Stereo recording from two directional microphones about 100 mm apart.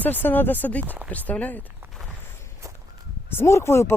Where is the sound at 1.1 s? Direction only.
15° left (ahead or behind).